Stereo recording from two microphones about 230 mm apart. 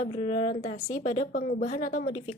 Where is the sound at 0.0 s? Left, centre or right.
Left.